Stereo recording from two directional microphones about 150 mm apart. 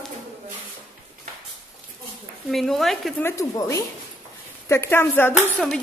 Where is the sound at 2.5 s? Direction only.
Centre (ahead or behind).